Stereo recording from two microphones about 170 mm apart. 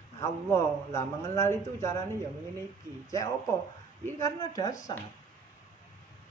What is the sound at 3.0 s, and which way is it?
A woman's voice, 20° left (ahead or behind).